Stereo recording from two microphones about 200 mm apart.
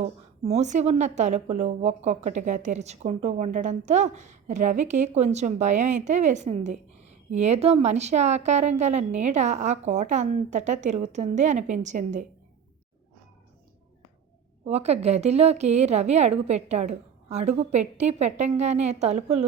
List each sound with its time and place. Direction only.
0.0 s a woman's voice: 35° right (ahead or behind)
14.6 s a woman's voice: 30° right (ahead or behind)